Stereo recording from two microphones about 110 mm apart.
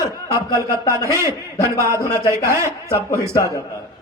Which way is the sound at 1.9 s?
30° left (ahead or behind).